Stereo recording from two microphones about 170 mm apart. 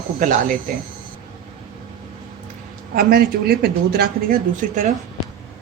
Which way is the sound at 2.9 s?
60° right (ahead or behind).